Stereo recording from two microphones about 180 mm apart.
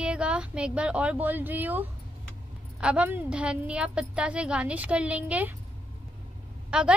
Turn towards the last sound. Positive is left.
turn(degrees=-5)  # may be behind; listen again after turning